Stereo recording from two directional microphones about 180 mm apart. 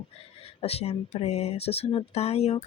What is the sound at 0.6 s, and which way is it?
Speech, 35° left (ahead or behind).